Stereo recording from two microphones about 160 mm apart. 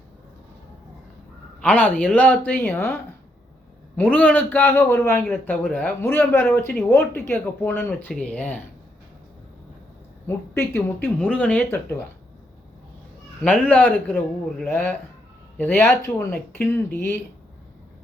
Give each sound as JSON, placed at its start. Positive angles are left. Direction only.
{"t": 1.6, "sound": "a man's voice", "side_deg": 10}
{"t": 3.9, "sound": "a man's voice", "side_deg": 10}
{"t": 10.2, "sound": "a man's voice", "side_deg": 15}
{"t": 13.4, "sound": "a man's voice", "side_deg": 10}